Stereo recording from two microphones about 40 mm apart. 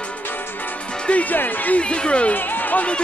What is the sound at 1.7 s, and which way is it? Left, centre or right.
Music, left.